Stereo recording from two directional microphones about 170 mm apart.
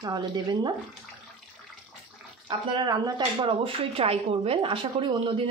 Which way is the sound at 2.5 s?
25° right (ahead or behind).